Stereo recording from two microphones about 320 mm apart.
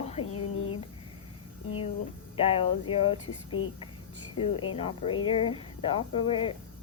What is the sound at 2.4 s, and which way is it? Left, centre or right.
Speech, centre.